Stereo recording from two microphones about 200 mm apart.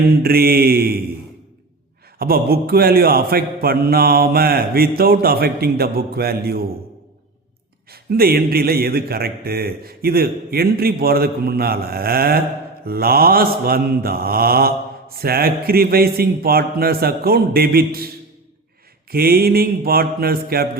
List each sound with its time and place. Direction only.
0.2 s mantra: 50° right (ahead or behind)
2.1 s mantra: 50° right (ahead or behind)
7.9 s mantra: 50° right (ahead or behind)
19.1 s mantra: 50° right (ahead or behind)